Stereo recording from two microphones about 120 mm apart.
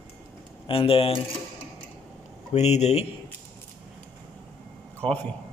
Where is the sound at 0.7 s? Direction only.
50° left (ahead or behind).